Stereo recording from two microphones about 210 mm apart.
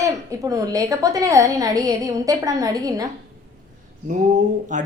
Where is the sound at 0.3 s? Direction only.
15° right (ahead or behind).